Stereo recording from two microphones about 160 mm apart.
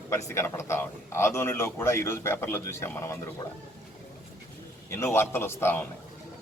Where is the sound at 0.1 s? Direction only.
15° left (ahead or behind).